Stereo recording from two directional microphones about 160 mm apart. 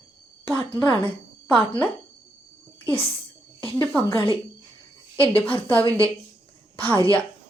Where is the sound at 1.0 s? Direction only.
10° left (ahead or behind).